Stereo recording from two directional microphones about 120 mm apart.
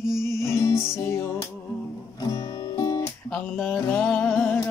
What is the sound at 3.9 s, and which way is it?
Music, 15° left (ahead or behind).